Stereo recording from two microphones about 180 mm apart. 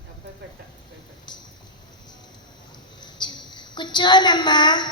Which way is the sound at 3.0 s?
25° left (ahead or behind).